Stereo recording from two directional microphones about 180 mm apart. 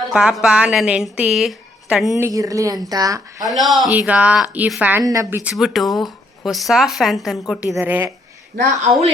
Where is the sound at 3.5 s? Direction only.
Centre (ahead or behind).